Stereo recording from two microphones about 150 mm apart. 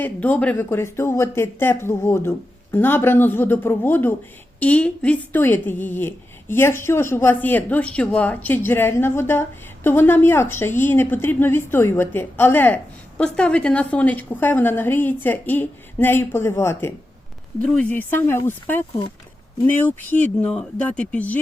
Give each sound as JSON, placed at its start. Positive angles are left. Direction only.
{"t": 0.0, "sound": "a woman's voice", "side_deg": 10}
{"t": 20.4, "sound": "a woman's voice", "side_deg": 10}